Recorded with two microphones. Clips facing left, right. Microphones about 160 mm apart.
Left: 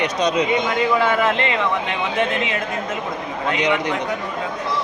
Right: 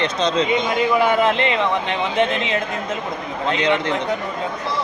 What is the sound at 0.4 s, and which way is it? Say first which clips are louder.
A man's voice: even; 20° right (ahead or behind).